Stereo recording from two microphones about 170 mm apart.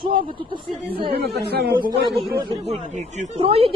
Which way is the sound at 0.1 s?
30° right (ahead or behind).